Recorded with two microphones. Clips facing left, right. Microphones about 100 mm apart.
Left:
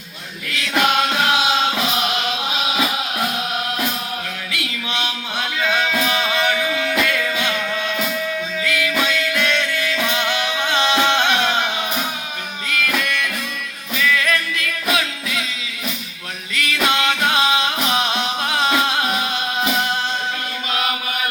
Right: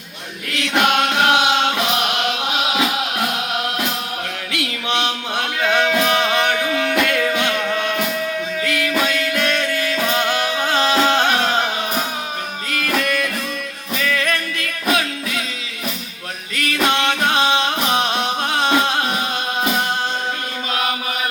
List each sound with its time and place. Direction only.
0.8 s music: 65° right (ahead or behind)
4.6 s music: 60° right (ahead or behind); by 15.4 s 40° right (ahead or behind)
16.6 s music: 40° right (ahead or behind)